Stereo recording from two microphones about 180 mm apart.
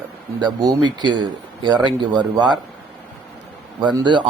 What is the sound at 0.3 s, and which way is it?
Speech, 25° right (ahead or behind).